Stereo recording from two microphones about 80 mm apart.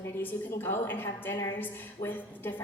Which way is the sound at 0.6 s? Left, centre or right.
Left.